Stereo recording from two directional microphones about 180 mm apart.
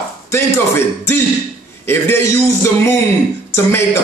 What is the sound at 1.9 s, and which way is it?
A man's voice, 15° left (ahead or behind).